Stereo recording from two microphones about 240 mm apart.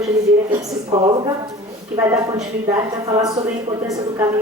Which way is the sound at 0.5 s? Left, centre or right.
Centre.